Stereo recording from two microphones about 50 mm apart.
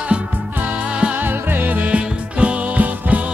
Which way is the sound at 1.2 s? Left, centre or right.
Right.